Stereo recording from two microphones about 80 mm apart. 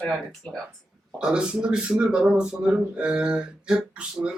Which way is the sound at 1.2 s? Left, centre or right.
Centre.